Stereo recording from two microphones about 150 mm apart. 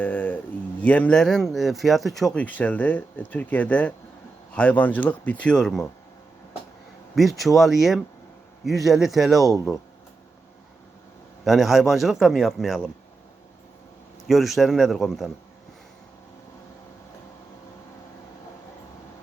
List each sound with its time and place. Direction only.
0.0 s speech: 10° left (ahead or behind)
7.2 s a man's voice: centre (ahead or behind)
11.4 s a man's voice: centre (ahead or behind)
14.3 s a man's voice: centre (ahead or behind)